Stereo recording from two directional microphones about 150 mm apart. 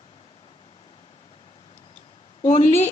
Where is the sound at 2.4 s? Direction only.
50° left (ahead or behind).